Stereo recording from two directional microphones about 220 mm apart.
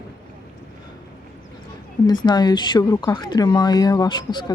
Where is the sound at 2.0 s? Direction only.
20° left (ahead or behind).